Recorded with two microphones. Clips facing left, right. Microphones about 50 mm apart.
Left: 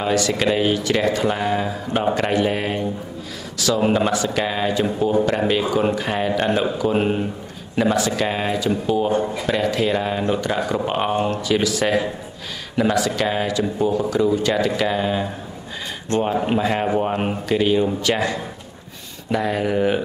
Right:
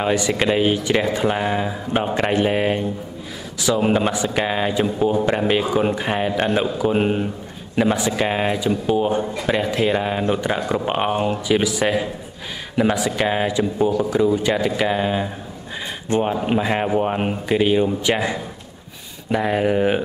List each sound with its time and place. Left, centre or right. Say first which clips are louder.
0.0 s speech: even; centre
7.7 s a man's voice: even; centre